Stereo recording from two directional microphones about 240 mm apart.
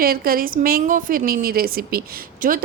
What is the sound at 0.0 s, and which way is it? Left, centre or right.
A woman's voice, right.